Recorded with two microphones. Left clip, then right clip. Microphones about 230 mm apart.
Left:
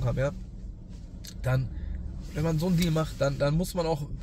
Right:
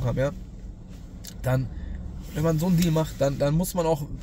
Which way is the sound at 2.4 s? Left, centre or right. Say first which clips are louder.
Right 4 dB; centre.